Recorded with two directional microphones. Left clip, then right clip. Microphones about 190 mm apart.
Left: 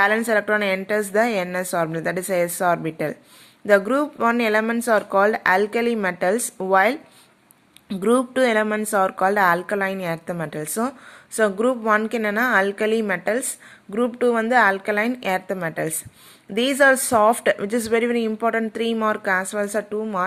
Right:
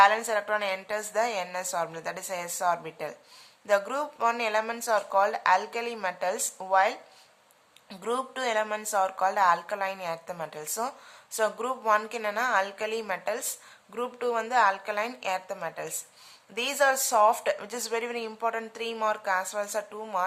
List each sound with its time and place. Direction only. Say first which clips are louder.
0.0 s speech: left 3 dB; 20° left (ahead or behind)
12.0 s speech: left 7 dB; 20° left (ahead or behind)